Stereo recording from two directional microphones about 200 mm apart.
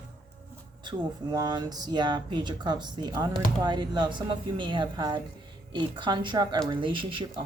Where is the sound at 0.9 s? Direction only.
20° right (ahead or behind).